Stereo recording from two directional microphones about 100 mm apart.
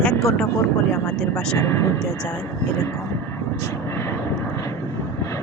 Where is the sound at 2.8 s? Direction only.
30° left (ahead or behind).